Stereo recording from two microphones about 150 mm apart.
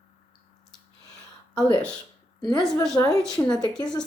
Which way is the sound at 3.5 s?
25° left (ahead or behind).